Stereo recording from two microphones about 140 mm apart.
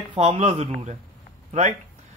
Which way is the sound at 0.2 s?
50° right (ahead or behind).